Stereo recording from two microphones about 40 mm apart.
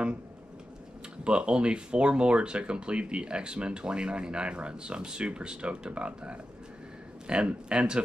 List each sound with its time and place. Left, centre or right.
1.2 s speech: right